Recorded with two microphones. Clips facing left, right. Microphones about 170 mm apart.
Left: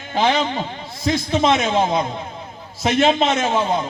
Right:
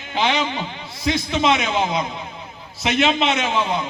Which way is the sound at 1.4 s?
45° left (ahead or behind).